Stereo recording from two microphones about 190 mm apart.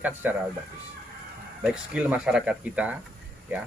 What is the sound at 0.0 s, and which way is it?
Speech, 10° right (ahead or behind).